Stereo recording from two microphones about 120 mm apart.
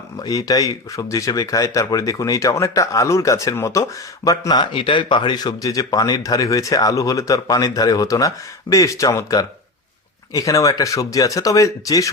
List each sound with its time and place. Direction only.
0.2 s speech: 30° left (ahead or behind)